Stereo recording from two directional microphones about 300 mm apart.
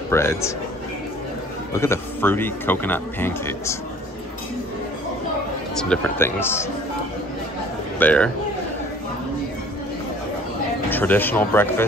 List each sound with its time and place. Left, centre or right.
0.1 s a man's voice: centre
1.7 s a man's voice: centre
5.8 s a man's voice: centre
8.0 s a man's voice: centre
10.9 s a man's voice: centre